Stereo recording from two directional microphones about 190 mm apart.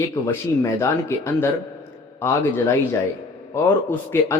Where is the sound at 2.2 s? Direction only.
15° left (ahead or behind).